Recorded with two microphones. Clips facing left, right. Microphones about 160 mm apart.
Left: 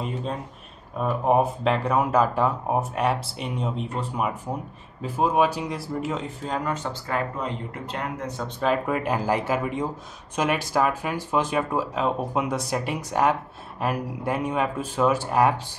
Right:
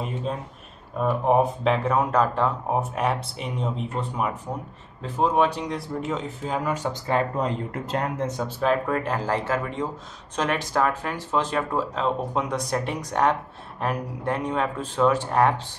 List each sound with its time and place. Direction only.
0.0 s a sound: centre (ahead or behind)
0.9 s speech: 5° left (ahead or behind)
7.3 s speech: 40° right (ahead or behind)
8.2 s speech: 20° right (ahead or behind)
8.5 s speech: 5° right (ahead or behind)
8.8 s speech: 10° left (ahead or behind)